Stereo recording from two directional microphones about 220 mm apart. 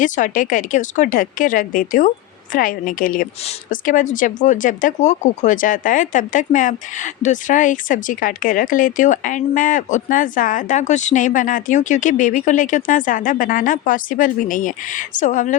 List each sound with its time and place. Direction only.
0.0 s speech: 35° left (ahead or behind)